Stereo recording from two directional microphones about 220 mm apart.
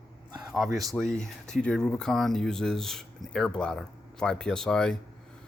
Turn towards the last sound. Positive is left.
turn(degrees=5)  # may be behind; listen again after turning